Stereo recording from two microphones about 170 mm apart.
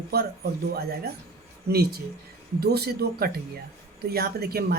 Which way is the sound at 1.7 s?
70° right (ahead or behind).